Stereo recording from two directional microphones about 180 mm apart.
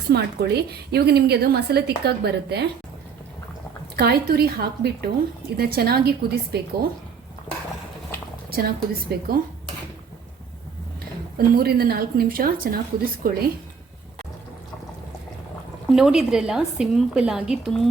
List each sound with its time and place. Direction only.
0.1 s a woman's voice: 65° right (ahead or behind)
3.9 s a woman's voice: 60° right (ahead or behind)
7.5 s a sound: 10° left (ahead or behind)
8.4 s a woman's voice: 55° right (ahead or behind)
11.3 s a woman's voice: 55° right (ahead or behind)
15.9 s a woman's voice: 5° right (ahead or behind)